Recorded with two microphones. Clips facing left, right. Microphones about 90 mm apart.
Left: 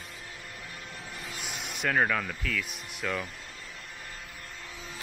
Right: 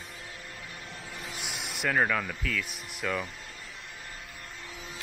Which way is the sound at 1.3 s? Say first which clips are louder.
Even; centre (ahead or behind).